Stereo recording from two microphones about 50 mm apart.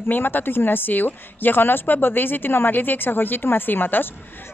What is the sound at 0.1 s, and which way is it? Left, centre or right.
A woman's voice, left.